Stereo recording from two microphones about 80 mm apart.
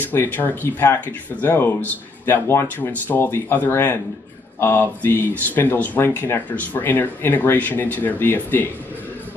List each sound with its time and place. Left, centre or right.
0.0 s speech: left